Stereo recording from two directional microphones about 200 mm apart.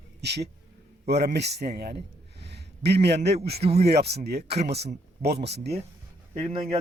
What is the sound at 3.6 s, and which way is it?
Speech, 30° right (ahead or behind).